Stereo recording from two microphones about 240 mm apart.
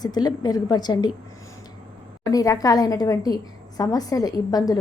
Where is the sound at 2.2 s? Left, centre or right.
Centre.